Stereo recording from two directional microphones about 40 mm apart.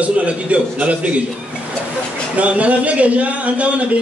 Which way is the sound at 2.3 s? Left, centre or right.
Right.